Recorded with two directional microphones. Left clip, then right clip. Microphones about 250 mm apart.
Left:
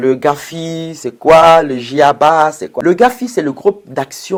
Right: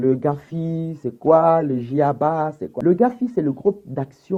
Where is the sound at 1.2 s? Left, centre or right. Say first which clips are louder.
Left 9 dB; left.